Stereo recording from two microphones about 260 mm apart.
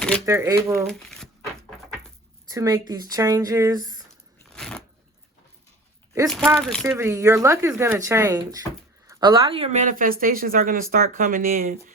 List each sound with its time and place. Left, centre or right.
0.3 s speech: centre
0.9 s crumpling: centre
2.5 s speech: centre
4.4 s a sound: centre
6.2 s speech: centre
6.9 s speech: centre; by 11.9 s right